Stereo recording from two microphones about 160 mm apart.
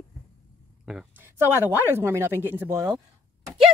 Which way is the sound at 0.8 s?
10° right (ahead or behind).